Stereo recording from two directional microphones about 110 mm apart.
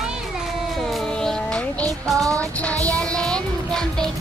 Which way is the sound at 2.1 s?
30° right (ahead or behind).